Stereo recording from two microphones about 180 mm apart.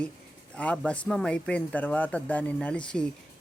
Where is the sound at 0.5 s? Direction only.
5° left (ahead or behind).